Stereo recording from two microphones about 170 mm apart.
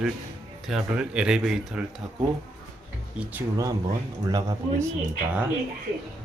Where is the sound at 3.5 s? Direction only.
20° right (ahead or behind).